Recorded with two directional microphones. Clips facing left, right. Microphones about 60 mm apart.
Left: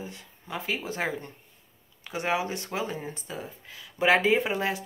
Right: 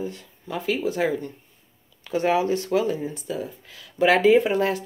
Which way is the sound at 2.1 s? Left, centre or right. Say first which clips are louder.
Right 7 dB; centre.